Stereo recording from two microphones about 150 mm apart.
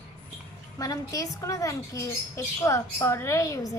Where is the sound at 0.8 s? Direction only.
25° left (ahead or behind).